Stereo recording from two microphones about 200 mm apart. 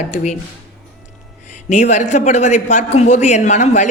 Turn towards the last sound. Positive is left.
turn(degrees=35)  # may be behind; listen again after turning